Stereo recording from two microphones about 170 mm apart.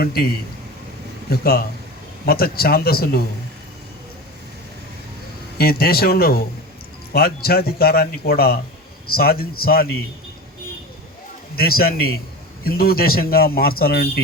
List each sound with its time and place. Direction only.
0.0 s a man's voice: 65° left (ahead or behind)
1.3 s a man's voice: 60° left (ahead or behind)
5.5 s a man's voice: 65° left (ahead or behind)
11.5 s a man's voice: 60° left (ahead or behind)